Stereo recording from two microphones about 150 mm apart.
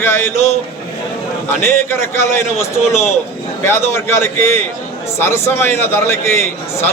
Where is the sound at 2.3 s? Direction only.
15° left (ahead or behind).